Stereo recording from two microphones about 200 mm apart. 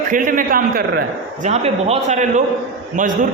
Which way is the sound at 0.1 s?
40° right (ahead or behind).